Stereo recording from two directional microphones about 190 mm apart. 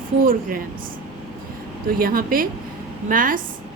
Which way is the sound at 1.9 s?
50° right (ahead or behind).